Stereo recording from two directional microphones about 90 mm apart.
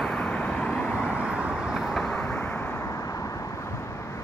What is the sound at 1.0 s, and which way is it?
Vehicle, 10° right (ahead or behind).